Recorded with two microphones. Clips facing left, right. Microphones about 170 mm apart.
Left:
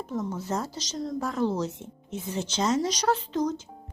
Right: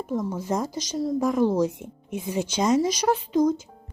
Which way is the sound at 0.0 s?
10° right (ahead or behind).